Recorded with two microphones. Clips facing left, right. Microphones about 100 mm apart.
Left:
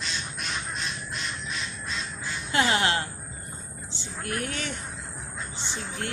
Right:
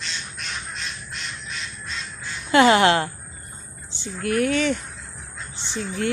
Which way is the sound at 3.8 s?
75° right (ahead or behind).